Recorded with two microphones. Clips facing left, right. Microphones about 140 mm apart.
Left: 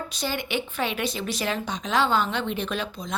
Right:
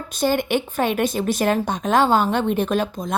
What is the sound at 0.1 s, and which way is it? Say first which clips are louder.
Speech: right 12 dB; 50° right (ahead or behind).